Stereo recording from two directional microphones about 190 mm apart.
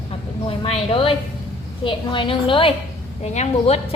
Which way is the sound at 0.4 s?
30° left (ahead or behind).